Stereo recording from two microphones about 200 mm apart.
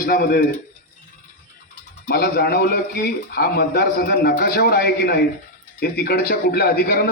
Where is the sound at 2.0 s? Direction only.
50° left (ahead or behind).